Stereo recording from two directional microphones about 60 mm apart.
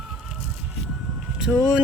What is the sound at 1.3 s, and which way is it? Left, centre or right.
Speech, centre.